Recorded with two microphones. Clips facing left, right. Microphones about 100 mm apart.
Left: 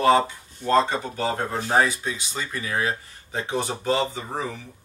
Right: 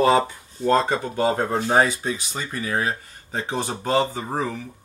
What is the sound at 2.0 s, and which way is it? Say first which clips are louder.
Speech: right 2 dB; 40° right (ahead or behind).